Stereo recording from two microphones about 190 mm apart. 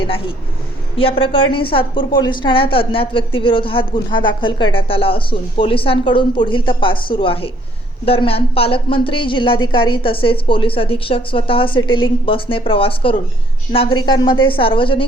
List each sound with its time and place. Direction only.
0.0 s a woman's voice: 30° left (ahead or behind)